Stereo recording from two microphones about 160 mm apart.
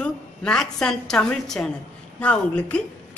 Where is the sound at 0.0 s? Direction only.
5° left (ahead or behind).